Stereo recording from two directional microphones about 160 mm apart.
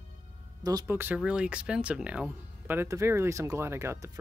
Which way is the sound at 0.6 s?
20° right (ahead or behind).